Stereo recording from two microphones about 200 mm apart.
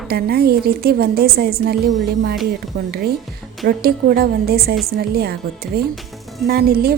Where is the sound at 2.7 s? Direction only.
55° right (ahead or behind).